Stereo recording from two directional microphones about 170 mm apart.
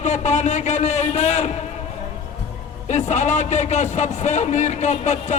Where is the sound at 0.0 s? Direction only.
45° left (ahead or behind).